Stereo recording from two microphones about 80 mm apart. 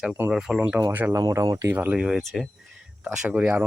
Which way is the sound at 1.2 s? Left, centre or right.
Right.